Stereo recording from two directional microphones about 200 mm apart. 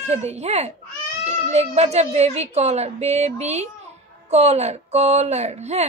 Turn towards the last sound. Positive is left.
turn(degrees=-30)  # may be behind; listen again after turning